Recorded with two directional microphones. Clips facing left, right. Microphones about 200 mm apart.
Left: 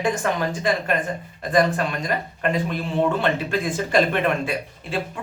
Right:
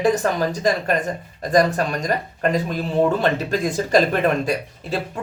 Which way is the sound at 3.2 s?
40° right (ahead or behind).